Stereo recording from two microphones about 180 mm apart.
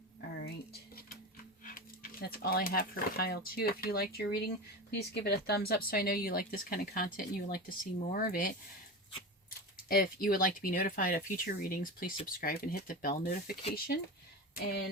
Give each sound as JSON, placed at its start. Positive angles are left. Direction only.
{"t": 0.4, "sound": "dishes", "side_deg": 60}
{"t": 1.6, "sound": "speech", "side_deg": 50}
{"t": 9.9, "sound": "speech", "side_deg": 55}